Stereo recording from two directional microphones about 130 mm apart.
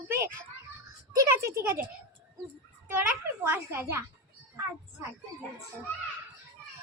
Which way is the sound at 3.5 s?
20° right (ahead or behind).